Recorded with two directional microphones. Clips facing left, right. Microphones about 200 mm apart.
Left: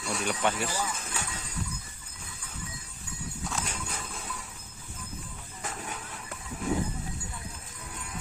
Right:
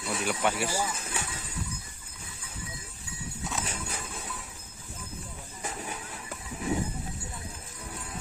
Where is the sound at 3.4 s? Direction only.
5° right (ahead or behind).